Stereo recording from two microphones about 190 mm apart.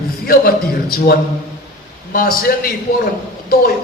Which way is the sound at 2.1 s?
50° left (ahead or behind).